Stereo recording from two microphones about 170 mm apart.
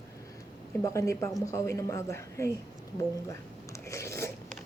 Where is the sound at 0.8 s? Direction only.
20° left (ahead or behind).